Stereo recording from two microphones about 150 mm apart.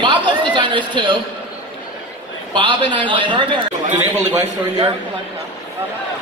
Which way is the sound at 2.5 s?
35° right (ahead or behind).